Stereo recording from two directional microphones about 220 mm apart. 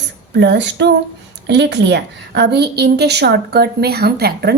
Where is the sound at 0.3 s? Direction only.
50° right (ahead or behind).